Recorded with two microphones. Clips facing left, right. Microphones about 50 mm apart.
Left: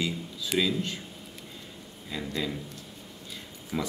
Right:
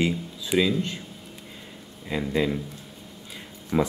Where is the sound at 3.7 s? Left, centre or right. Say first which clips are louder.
Right 8 dB; right.